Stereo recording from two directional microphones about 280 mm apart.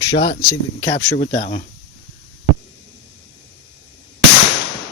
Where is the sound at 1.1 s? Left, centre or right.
Left.